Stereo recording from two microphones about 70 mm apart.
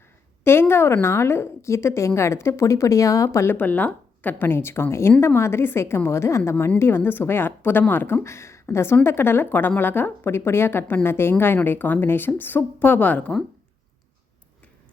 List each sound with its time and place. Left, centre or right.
0.4 s a sound: left
1.0 s a woman's voice: left
3.3 s a woman's voice: left
3.6 s a woman's voice: left